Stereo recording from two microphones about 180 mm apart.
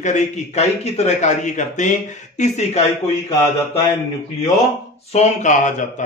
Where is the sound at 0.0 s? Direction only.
40° left (ahead or behind).